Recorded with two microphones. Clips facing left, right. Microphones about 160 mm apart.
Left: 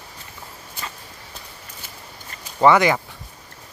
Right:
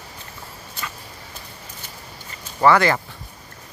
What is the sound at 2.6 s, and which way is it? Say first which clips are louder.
Speech: left 1 dB; 15° left (ahead or behind).